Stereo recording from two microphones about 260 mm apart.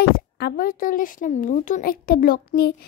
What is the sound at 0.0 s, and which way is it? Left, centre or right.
Speech, left.